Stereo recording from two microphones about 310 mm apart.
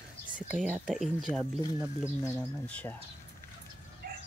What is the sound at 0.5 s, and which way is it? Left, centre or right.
Speech, centre.